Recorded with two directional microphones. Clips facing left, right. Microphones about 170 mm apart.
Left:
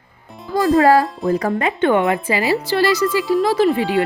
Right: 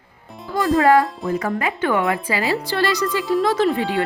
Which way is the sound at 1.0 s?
Centre (ahead or behind).